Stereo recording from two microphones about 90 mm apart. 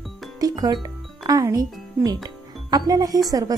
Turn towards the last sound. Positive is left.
turn(degrees=-45)  # may be behind; listen again after turning